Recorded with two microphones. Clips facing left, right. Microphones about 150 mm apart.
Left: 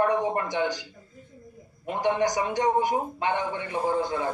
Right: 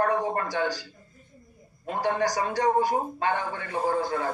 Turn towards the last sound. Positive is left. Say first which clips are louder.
# even
turn(degrees=20)  # may be behind; listen again after turning